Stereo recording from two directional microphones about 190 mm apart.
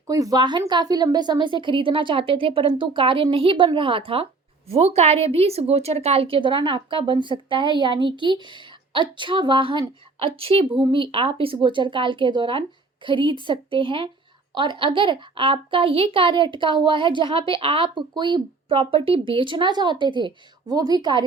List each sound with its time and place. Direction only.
0.1 s a woman's voice: 20° right (ahead or behind)